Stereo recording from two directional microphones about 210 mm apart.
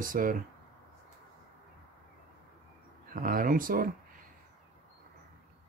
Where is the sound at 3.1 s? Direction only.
40° right (ahead or behind).